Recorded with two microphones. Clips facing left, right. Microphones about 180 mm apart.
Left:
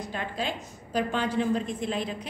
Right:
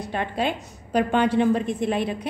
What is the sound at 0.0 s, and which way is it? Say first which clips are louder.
A woman's voice: right 6 dB; 65° right (ahead or behind).